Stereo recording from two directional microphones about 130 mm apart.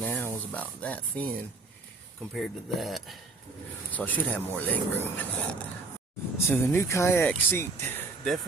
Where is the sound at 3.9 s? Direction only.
10° left (ahead or behind).